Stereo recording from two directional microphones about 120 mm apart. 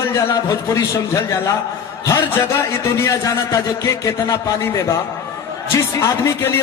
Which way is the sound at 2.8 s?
25° left (ahead or behind).